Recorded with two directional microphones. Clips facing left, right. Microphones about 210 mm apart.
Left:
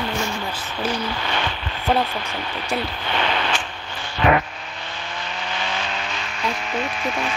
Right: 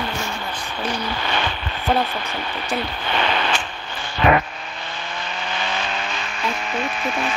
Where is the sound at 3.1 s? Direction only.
50° right (ahead or behind).